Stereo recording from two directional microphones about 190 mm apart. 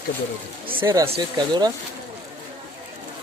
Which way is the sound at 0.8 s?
20° right (ahead or behind).